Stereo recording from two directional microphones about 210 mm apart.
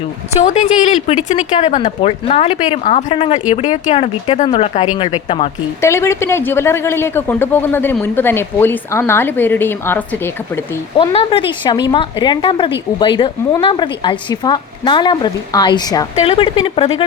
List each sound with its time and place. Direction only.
0.3 s a woman's voice: 35° left (ahead or behind)
5.8 s speech: 15° left (ahead or behind)
10.9 s a woman's voice: 25° left (ahead or behind)